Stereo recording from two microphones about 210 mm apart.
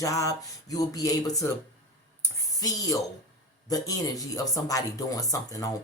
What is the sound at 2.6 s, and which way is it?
Speech, 15° left (ahead or behind).